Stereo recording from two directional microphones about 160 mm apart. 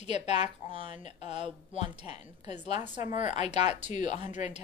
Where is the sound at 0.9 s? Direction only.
45° left (ahead or behind).